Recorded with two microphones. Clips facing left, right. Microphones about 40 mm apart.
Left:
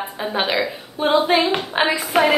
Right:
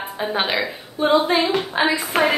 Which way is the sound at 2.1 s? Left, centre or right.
Centre.